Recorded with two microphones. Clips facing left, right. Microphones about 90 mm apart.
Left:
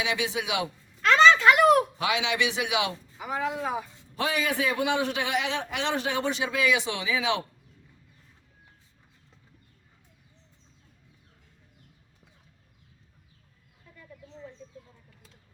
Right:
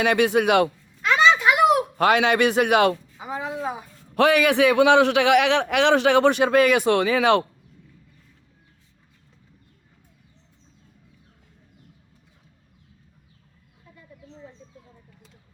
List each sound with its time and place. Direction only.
0.0 s a man's voice: 55° right (ahead or behind)
1.0 s a sound: 15° right (ahead or behind)
2.0 s a man's voice: 50° right (ahead or behind)
3.2 s a woman's voice: 25° right (ahead or behind)
4.1 s a man's voice: 65° right (ahead or behind)